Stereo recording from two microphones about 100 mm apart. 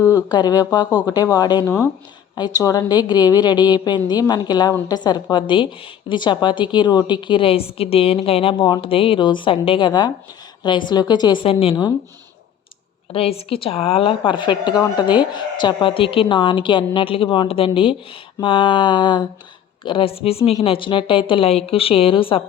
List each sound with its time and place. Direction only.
0.3 s a woman's voice: 45° left (ahead or behind)
13.1 s a woman's voice: 75° left (ahead or behind); by 19.3 s 50° left (ahead or behind)
19.8 s speech: 60° left (ahead or behind); by 20.5 s 75° left (ahead or behind)
20.7 s a woman's voice: 60° left (ahead or behind)